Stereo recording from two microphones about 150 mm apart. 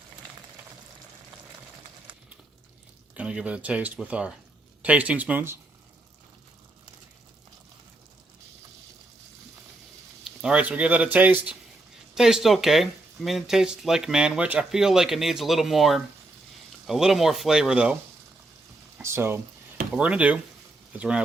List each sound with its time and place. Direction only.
3.2 s speech: 10° right (ahead or behind)
10.2 s speech: 5° right (ahead or behind)
18.9 s speech: 15° right (ahead or behind)